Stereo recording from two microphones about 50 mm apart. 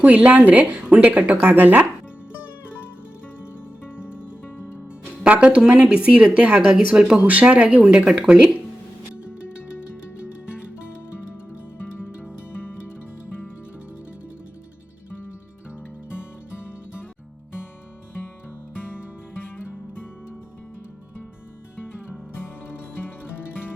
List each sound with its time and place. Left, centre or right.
0.0 s speech: right
3.8 s music: left
5.2 s speech: right
7.2 s speech: right
7.9 s speech: centre
12.3 s music: left
18.8 s music: left